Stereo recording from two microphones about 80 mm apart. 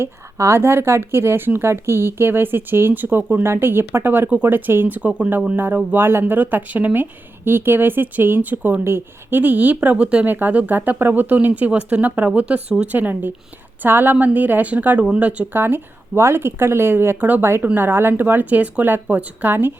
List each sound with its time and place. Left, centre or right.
0.0 s speech: right; by 15.4 s centre
15.5 s speech: right